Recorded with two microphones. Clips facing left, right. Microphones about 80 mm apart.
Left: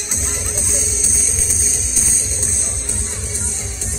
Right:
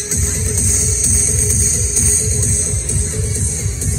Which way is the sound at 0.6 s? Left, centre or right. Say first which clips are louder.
Right 2 dB; right.